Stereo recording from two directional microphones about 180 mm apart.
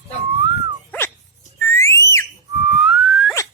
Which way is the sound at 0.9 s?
10° left (ahead or behind).